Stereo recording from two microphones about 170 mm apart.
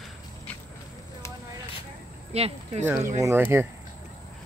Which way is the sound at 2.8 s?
15° right (ahead or behind).